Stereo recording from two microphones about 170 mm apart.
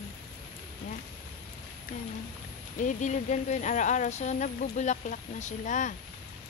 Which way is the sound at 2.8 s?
45° left (ahead or behind).